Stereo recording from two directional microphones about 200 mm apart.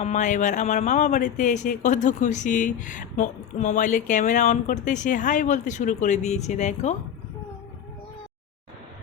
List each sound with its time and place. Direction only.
0.0 s speech: 35° left (ahead or behind)